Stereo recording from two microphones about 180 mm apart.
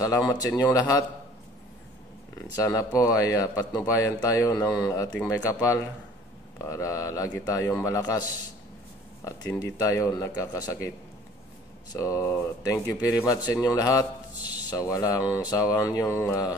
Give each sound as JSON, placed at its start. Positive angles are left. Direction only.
{"t": 0.3, "sound": "speech", "side_deg": 20}
{"t": 2.5, "sound": "a man's voice", "side_deg": 20}
{"t": 11.9, "sound": "a man's voice", "side_deg": 15}